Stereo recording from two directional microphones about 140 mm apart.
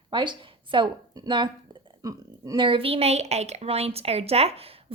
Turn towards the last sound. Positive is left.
turn(degrees=-45)  # may be behind; listen again after turning